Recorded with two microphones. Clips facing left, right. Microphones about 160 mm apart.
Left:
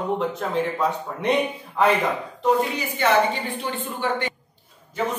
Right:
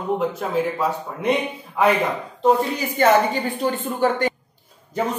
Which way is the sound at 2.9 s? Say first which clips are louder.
Right 4 dB; 45° right (ahead or behind).